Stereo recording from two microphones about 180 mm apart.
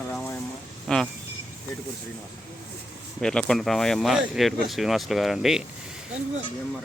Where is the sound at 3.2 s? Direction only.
5° left (ahead or behind).